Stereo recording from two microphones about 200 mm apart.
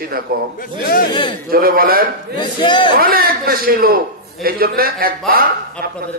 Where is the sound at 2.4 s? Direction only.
25° left (ahead or behind).